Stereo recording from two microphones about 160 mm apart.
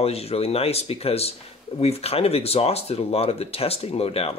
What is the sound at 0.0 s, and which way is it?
Speech, 40° left (ahead or behind).